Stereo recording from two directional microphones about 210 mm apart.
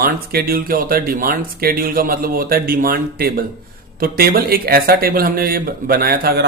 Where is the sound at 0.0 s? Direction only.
45° right (ahead or behind).